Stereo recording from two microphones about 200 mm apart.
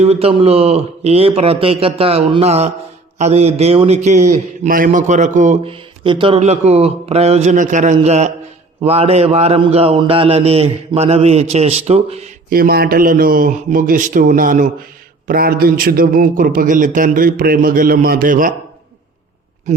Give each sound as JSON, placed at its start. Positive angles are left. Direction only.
{"t": 0.0, "sound": "a man's voice", "side_deg": -30}
{"t": 12.5, "sound": "speech", "side_deg": -50}
{"t": 19.7, "sound": "a sound", "side_deg": -35}